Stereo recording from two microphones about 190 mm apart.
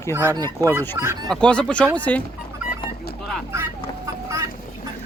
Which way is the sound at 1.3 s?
5° left (ahead or behind).